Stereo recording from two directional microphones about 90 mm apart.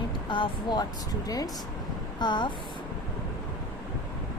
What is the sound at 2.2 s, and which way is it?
Speech, 60° left (ahead or behind).